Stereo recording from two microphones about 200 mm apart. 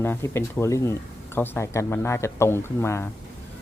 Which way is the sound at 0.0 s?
10° left (ahead or behind).